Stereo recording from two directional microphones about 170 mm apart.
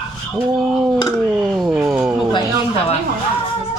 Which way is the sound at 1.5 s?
Centre (ahead or behind).